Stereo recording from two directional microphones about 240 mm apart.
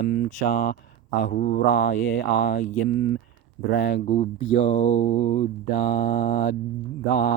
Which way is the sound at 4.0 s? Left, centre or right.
Left.